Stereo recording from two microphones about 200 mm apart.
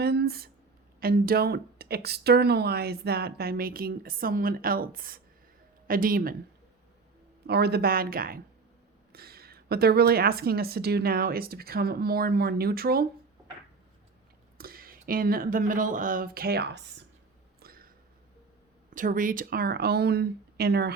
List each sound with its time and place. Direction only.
0.0 s speech: 55° right (ahead or behind)
7.4 s speech: 55° right (ahead or behind)
14.6 s speech: 45° right (ahead or behind)
17.6 s a sound: 45° right (ahead or behind)
18.9 s speech: 40° right (ahead or behind)